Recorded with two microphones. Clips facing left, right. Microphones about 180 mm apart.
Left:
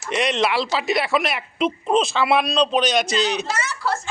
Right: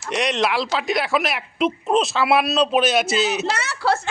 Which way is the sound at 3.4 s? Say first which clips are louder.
Right 3 dB; 70° right (ahead or behind).